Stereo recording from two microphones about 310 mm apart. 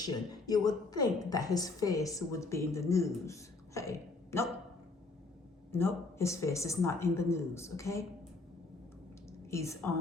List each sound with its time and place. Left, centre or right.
0.0 s a woman's voice: centre
5.7 s a woman's voice: centre
9.5 s a woman's voice: centre